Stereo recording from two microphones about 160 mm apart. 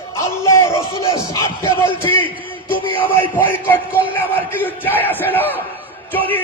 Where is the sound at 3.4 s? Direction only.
10° left (ahead or behind).